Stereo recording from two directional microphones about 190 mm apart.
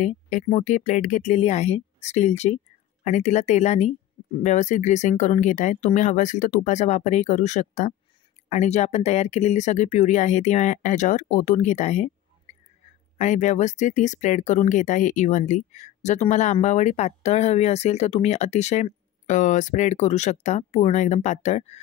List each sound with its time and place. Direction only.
0.0 s speech: 40° left (ahead or behind)